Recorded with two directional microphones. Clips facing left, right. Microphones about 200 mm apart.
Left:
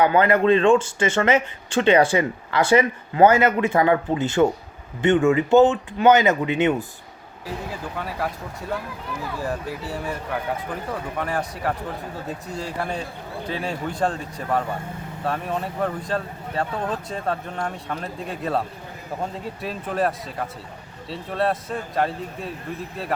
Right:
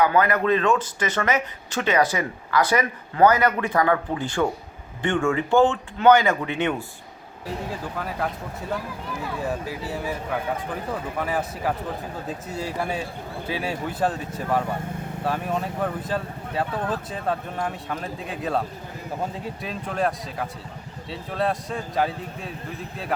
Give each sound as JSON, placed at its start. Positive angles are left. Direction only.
{"t": 0.0, "sound": "speech", "side_deg": 30}
{"t": 7.9, "sound": "speech", "side_deg": 0}
{"t": 9.4, "sound": "a man's voice", "side_deg": 0}
{"t": 19.6, "sound": "speech", "side_deg": 0}